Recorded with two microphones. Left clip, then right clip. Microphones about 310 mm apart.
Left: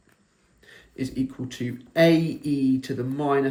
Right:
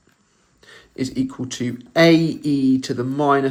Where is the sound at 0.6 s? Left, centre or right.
Centre.